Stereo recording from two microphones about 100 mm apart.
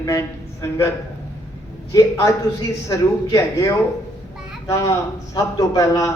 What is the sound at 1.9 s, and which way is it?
Speech, 30° left (ahead or behind).